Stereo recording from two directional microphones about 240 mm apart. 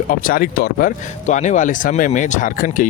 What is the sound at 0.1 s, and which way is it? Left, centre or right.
Speech, left.